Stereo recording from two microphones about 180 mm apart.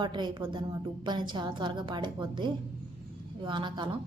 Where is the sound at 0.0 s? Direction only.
25° right (ahead or behind).